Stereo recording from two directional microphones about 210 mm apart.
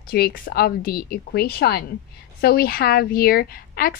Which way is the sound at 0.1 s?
50° left (ahead or behind).